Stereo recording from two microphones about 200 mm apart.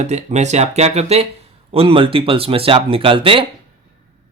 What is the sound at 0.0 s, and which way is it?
Speech, 35° right (ahead or behind).